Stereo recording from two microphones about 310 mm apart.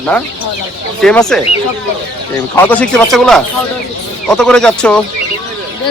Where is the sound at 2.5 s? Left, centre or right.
Centre.